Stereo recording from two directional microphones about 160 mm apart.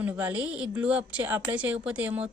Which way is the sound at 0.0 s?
10° right (ahead or behind).